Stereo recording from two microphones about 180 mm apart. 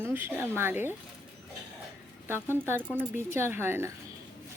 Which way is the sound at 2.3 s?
15° right (ahead or behind).